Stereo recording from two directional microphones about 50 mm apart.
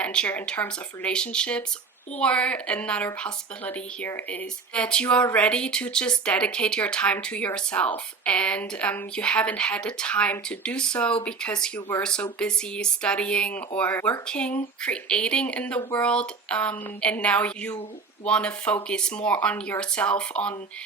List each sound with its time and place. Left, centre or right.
0.0 s speech: left
4.7 s speech: left
13.5 s speech: left
14.3 s speech: left